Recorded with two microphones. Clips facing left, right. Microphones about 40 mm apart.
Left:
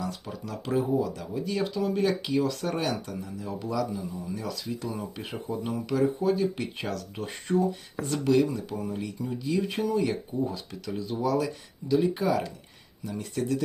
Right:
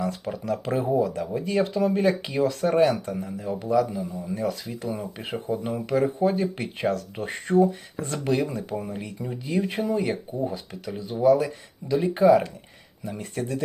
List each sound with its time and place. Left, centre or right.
0.0 s speech: right